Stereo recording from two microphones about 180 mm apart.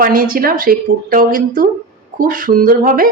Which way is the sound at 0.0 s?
50° right (ahead or behind).